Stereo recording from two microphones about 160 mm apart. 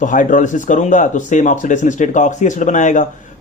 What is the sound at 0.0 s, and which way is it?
Speech, 55° left (ahead or behind).